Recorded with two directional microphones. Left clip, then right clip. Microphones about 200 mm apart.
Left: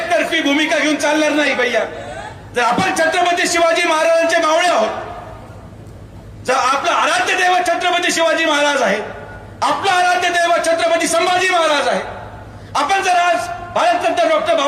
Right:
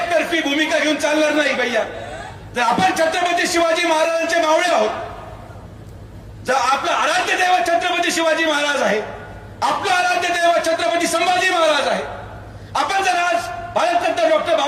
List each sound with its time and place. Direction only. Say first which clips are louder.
0.1 s a man's voice: left 5 dB; 25° left (ahead or behind)
6.4 s a man's voice: left 2 dB; 25° left (ahead or behind)